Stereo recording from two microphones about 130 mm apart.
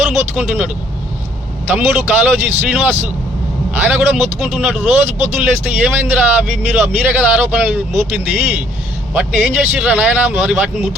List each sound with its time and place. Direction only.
0.0 s speech: 10° right (ahead or behind)